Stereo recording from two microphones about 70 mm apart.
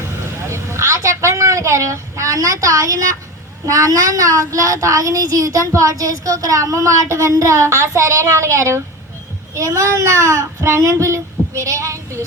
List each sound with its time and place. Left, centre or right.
0.2 s vehicle: right
3.7 s a child's voice: right